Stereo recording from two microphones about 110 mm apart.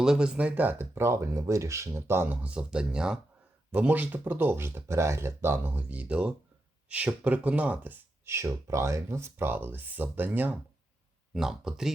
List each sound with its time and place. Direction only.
0.0 s speech: 5° right (ahead or behind)
11.3 s speech: 5° right (ahead or behind)